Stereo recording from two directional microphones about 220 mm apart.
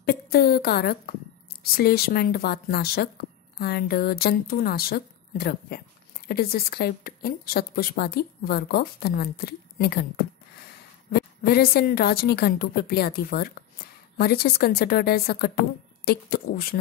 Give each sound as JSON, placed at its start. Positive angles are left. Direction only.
{"t": 0.0, "sound": "a woman's voice", "side_deg": 45}